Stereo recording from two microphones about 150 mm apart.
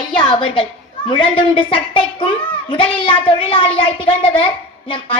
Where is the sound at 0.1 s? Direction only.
30° left (ahead or behind).